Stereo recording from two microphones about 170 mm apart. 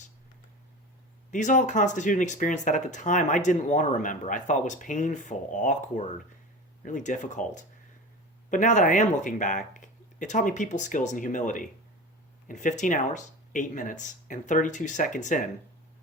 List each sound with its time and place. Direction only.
1.3 s speech: 45° left (ahead or behind)
6.8 s speech: 50° left (ahead or behind)